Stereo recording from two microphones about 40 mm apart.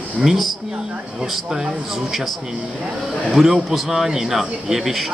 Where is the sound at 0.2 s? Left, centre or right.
Centre.